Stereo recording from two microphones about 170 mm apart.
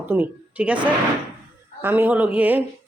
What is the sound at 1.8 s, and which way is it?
Speech, 10° right (ahead or behind).